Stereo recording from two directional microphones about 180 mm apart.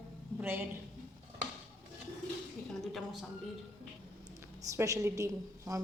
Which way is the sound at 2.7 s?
Centre (ahead or behind).